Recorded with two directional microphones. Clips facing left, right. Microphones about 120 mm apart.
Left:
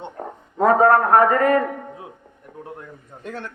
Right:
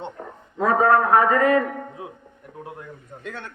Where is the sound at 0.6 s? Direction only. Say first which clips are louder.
Left 3 dB; 45° left (ahead or behind).